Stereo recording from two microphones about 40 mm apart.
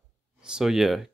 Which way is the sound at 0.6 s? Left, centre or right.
Centre.